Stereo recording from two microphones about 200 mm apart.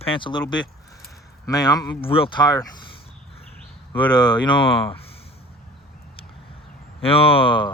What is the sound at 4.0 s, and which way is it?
Speech, 20° left (ahead or behind).